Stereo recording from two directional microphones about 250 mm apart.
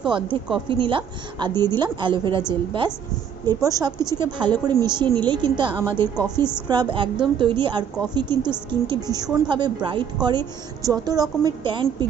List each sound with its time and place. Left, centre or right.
0.0 s a woman's voice: centre